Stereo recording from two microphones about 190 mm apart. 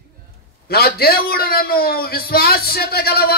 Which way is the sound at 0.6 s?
55° left (ahead or behind).